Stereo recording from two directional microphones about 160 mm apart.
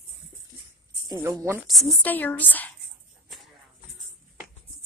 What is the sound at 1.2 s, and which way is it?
Speech, 15° right (ahead or behind).